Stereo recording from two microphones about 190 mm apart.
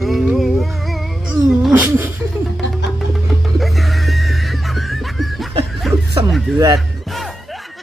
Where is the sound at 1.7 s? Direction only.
10° right (ahead or behind).